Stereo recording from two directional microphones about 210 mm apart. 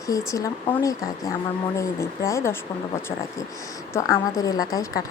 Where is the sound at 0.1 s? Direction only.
15° left (ahead or behind).